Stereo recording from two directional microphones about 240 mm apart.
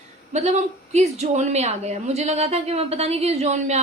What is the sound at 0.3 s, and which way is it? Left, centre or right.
Speech, right.